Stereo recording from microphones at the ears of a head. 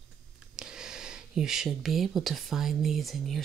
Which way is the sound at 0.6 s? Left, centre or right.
Right.